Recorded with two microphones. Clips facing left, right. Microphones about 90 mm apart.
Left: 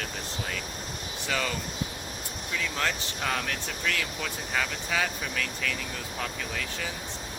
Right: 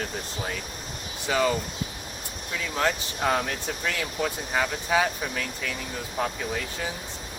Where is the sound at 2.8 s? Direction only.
20° right (ahead or behind).